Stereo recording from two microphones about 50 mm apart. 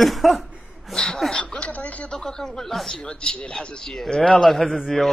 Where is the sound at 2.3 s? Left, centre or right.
Centre.